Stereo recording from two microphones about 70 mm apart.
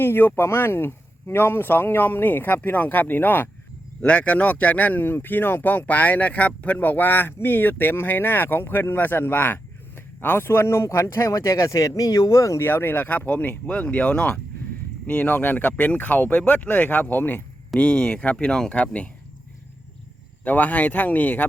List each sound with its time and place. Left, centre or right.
0.0 s speech: left
4.0 s speech: centre
20.4 s speech: left